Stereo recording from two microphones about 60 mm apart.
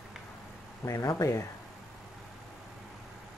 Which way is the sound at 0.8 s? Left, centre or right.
Left.